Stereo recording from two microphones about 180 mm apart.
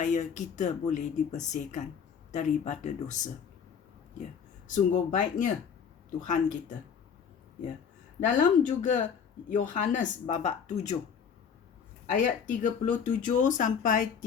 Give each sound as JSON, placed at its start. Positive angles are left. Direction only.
{"t": 0.0, "sound": "speech", "side_deg": 45}
{"t": 4.7, "sound": "speech", "side_deg": 45}
{"t": 8.3, "sound": "speech", "side_deg": 45}
{"t": 12.1, "sound": "speech", "side_deg": 45}